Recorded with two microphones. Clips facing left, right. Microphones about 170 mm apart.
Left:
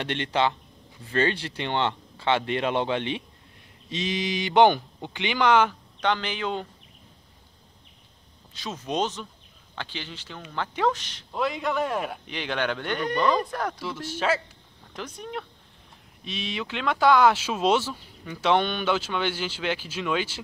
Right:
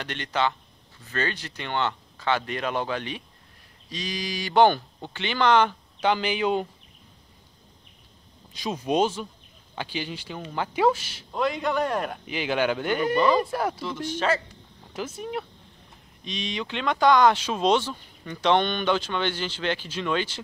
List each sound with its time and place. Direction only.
0.0 s speech: 30° left (ahead or behind); by 5.8 s 10° left (ahead or behind)
5.9 s speech: 10° right (ahead or behind)
8.5 s speech: 10° right (ahead or behind)
14.0 s speech: 5° left (ahead or behind)
15.0 s speech: 5° right (ahead or behind)